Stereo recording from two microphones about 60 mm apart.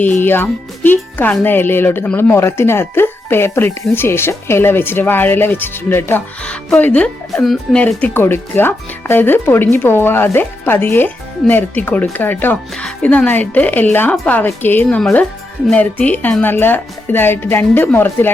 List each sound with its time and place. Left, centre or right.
0.0 s speech: left
6.4 s speech: centre
7.3 s speech: centre
7.7 s speech: centre
8.1 s speech: left
16.4 s speech: left